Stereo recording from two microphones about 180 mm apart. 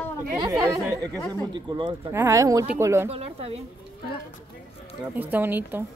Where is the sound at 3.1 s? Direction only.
35° right (ahead or behind).